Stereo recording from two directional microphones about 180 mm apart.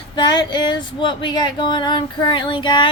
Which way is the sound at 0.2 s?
25° left (ahead or behind).